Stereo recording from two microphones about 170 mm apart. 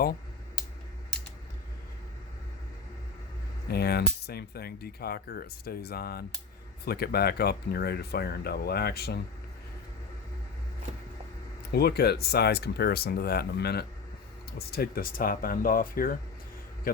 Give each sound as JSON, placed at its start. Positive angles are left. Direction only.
{"t": 3.7, "sound": "speech", "side_deg": 70}
{"t": 11.7, "sound": "speech", "side_deg": 65}